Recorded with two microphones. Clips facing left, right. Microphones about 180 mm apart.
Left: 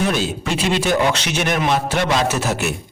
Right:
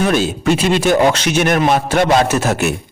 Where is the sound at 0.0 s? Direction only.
50° right (ahead or behind).